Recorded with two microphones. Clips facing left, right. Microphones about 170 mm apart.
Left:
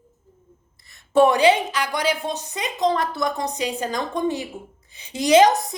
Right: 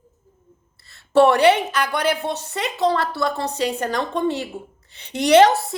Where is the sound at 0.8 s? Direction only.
15° left (ahead or behind).